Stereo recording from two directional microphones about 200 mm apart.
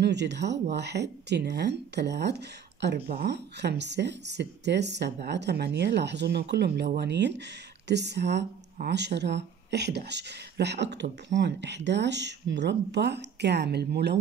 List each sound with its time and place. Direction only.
0.0 s speech: 60° right (ahead or behind)